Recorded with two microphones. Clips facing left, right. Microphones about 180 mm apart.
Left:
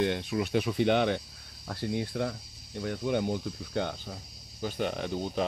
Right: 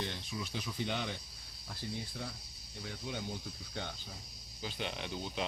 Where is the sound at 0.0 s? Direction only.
60° left (ahead or behind).